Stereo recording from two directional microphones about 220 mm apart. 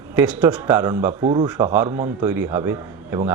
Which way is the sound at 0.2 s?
10° right (ahead or behind).